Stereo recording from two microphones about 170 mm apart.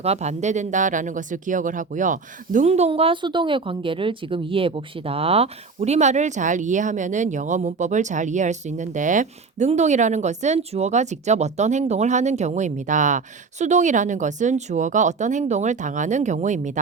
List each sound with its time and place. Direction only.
0.0 s speech: 40° right (ahead or behind)